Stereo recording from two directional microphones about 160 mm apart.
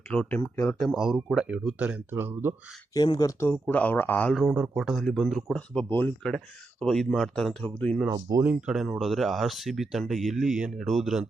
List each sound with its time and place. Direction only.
0.1 s speech: 10° left (ahead or behind)
0.9 s speech: 5° right (ahead or behind)
2.9 s speech: 25° left (ahead or behind)
3.5 s speech: 10° left (ahead or behind)
8.1 s speech: 20° right (ahead or behind)
8.6 s speech: centre (ahead or behind)